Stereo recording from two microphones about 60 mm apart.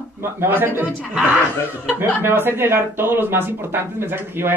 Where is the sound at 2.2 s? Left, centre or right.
Right.